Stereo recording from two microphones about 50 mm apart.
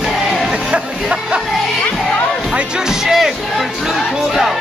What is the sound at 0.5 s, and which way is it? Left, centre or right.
Music, centre.